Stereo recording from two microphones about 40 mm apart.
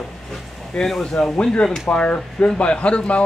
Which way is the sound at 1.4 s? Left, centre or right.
Left.